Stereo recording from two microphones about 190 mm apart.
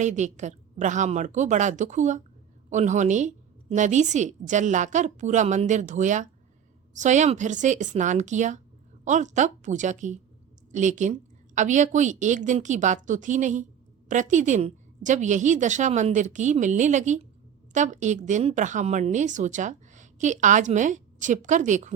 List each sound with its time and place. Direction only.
0.0 s a woman's voice: 40° right (ahead or behind)